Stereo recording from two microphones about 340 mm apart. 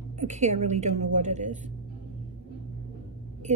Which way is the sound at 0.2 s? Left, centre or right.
Centre.